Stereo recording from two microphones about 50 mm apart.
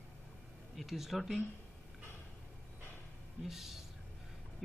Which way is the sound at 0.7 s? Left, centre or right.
Centre.